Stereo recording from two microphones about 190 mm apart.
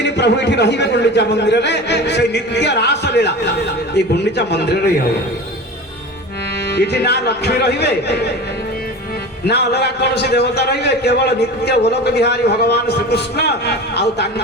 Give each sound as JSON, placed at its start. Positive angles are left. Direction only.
{"t": 0.0, "sound": "a man's voice", "side_deg": 65}
{"t": 6.7, "sound": "a man's voice", "side_deg": 60}
{"t": 9.5, "sound": "a man's voice", "side_deg": 60}